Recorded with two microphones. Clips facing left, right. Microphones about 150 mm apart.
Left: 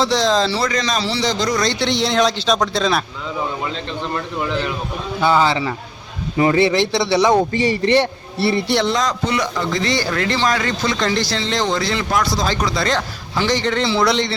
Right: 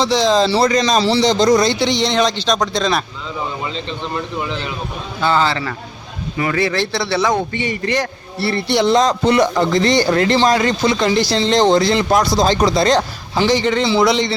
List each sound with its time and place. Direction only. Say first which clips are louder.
0.0 s speech: right 2 dB; centre (ahead or behind)
0.5 s speech: right 6 dB; 25° right (ahead or behind)
1.6 s speech: right 2 dB; 5° right (ahead or behind)
5.2 s a man's voice: left 1 dB; 10° left (ahead or behind)
7.3 s a man's voice: left 4 dB; 35° left (ahead or behind)
9.0 s speech: right 6 dB; 25° right (ahead or behind)
9.3 s a man's voice: right 7 dB; 45° right (ahead or behind)
9.7 s speech: right 6 dB; 25° right (ahead or behind)
10.8 s speech: right 2 dB; 15° right (ahead or behind)
11.3 s speech: right 7 dB; 30° right (ahead or behind)
13.5 s speech: right 3 dB; 5° right (ahead or behind)